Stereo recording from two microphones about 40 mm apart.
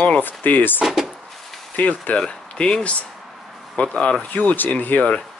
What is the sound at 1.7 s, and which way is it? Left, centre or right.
Speech, left.